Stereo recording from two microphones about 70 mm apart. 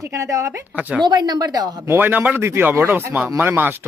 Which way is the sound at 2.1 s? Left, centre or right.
Right.